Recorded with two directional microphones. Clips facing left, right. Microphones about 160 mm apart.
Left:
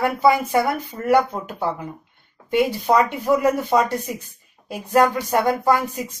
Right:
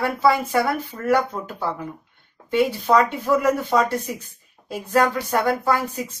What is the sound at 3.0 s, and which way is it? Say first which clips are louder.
Speech: even; 15° left (ahead or behind).